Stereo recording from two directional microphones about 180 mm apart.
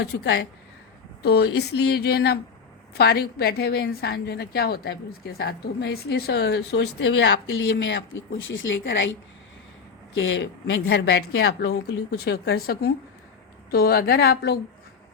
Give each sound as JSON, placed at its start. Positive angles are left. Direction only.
{"t": 0.0, "sound": "a woman's voice", "side_deg": 70}
{"t": 10.2, "sound": "a woman's voice", "side_deg": 90}